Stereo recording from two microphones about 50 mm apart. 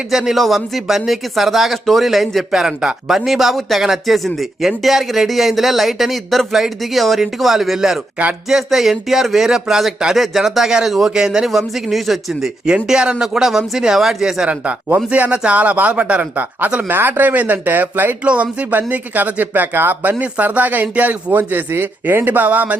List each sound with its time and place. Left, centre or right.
0.1 s speech: centre
12.6 s speech: centre
14.8 s speech: right